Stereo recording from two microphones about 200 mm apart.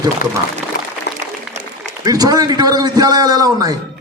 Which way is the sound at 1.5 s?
35° right (ahead or behind).